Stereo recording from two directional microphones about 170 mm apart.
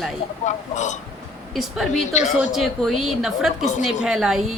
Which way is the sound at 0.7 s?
45° left (ahead or behind).